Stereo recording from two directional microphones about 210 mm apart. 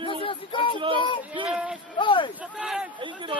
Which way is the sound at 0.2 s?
25° left (ahead or behind).